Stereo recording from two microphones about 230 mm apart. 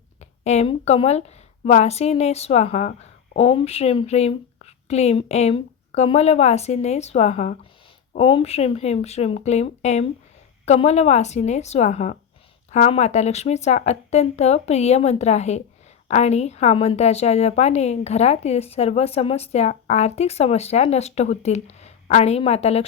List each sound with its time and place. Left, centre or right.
0.2 s a woman's voice: left